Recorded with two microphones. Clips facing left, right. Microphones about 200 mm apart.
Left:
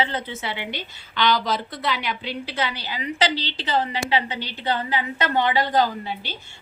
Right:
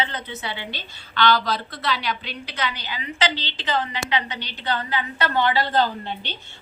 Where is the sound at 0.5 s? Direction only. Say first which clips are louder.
Left 3 dB; 20° left (ahead or behind).